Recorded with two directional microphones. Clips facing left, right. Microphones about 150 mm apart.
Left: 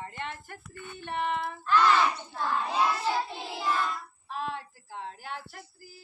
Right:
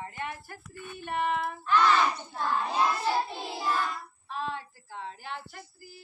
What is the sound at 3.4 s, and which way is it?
A woman's voice, 5° left (ahead or behind).